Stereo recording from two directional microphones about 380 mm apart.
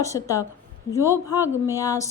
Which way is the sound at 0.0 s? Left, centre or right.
Centre.